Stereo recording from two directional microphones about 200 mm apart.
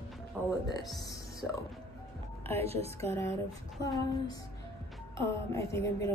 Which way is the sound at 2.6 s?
30° right (ahead or behind).